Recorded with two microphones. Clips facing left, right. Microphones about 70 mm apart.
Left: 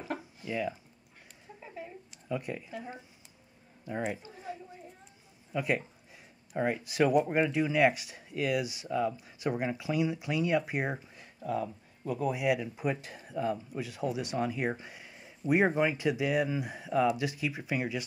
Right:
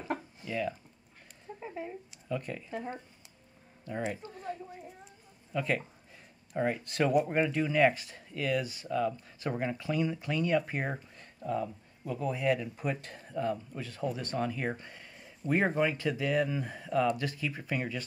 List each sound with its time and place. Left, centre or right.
0.5 s speech: centre
1.6 s speech: right
2.2 s speech: centre
3.8 s speech: centre